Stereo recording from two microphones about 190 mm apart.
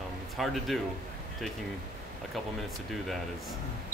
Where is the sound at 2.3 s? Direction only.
Centre (ahead or behind).